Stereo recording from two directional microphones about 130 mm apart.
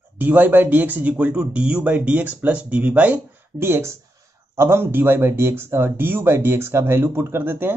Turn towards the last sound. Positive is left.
turn(degrees=-15)  # may be behind; listen again after turning